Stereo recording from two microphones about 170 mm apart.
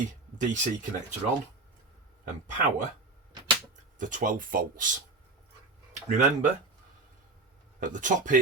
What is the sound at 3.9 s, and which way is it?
Speech, 50° right (ahead or behind).